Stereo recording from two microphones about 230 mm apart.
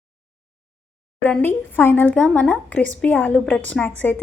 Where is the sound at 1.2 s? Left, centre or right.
Centre.